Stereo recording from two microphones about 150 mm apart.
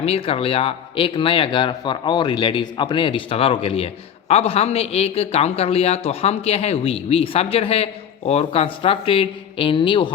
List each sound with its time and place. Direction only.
0.0 s speech: 40° left (ahead or behind)